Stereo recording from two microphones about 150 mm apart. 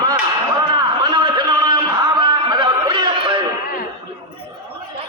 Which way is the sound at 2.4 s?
30° right (ahead or behind).